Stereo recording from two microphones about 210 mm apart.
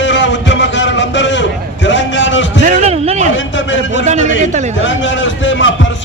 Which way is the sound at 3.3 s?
60° left (ahead or behind).